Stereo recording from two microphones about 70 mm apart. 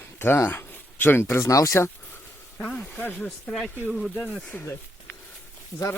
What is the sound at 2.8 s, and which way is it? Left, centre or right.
Speech, centre.